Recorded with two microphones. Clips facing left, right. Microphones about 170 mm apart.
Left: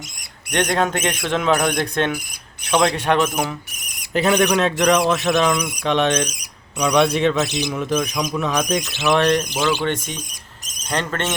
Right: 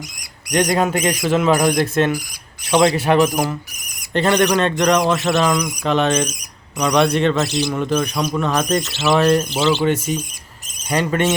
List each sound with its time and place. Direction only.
0.5 s speech: 10° right (ahead or behind)
7.4 s speech: 20° left (ahead or behind)
7.7 s speech: centre (ahead or behind)
8.8 s speech: 15° left (ahead or behind)
9.0 s speech: 5° right (ahead or behind)